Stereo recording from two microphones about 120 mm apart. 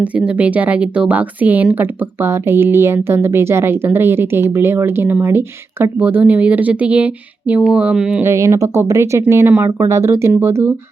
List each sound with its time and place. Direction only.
0.0 s speech: 10° right (ahead or behind)
8.2 s speech: 25° right (ahead or behind)